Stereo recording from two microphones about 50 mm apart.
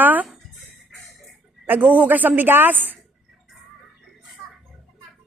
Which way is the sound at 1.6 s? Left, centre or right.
Right.